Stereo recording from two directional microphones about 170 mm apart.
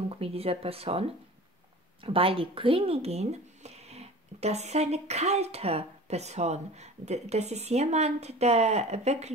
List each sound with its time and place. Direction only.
0.1 s speech: 35° right (ahead or behind)